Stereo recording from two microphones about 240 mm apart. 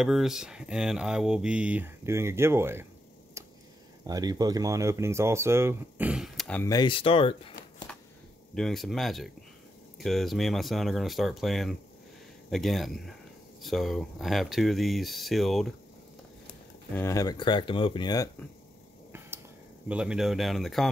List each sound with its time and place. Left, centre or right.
0.0 s speech: centre
4.0 s speech: centre; by 7.5 s left
7.9 s a sound: centre
8.5 s speech: centre
16.9 s speech: centre
19.9 s speech: centre